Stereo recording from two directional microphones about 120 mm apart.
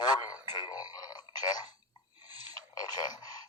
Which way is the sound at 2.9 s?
35° left (ahead or behind).